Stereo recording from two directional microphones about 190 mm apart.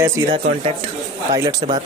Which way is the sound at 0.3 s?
35° right (ahead or behind).